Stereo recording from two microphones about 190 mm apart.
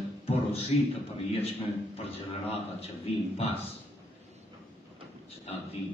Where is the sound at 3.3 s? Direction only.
30° left (ahead or behind).